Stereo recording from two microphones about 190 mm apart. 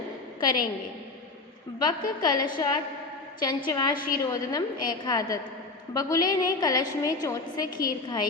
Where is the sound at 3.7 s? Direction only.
20° left (ahead or behind).